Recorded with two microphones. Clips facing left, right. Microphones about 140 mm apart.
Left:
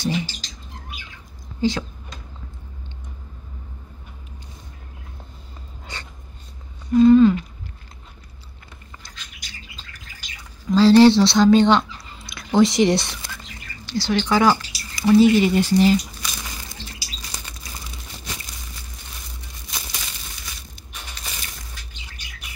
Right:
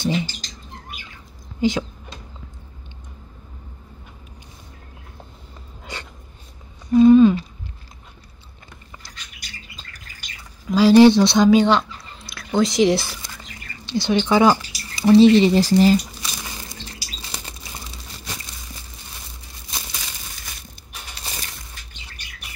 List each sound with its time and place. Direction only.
0.0 s rodents: 20° right (ahead or behind)
1.6 s a sound: 20° right (ahead or behind)
6.9 s a sound: 15° right (ahead or behind)
10.7 s speech: 15° right (ahead or behind)
11.6 s speech: centre (ahead or behind)
13.8 s speech: 20° right (ahead or behind); by 16.3 s 40° right (ahead or behind)